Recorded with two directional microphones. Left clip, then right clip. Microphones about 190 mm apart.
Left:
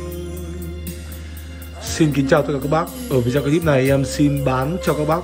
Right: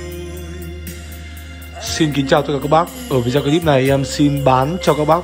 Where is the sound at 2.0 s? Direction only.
Centre (ahead or behind).